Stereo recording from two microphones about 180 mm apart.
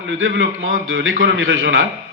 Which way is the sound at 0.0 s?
90° right.